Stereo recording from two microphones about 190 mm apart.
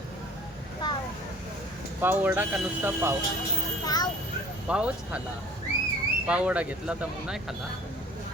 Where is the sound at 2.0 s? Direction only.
10° right (ahead or behind).